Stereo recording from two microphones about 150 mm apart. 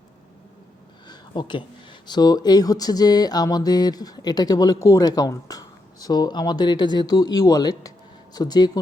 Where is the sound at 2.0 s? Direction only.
25° left (ahead or behind).